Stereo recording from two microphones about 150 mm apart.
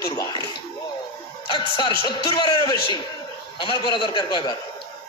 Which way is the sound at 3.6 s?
35° left (ahead or behind).